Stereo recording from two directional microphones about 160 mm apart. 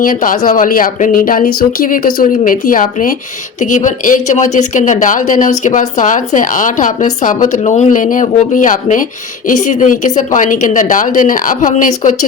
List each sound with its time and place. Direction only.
0.0 s speech: 60° left (ahead or behind)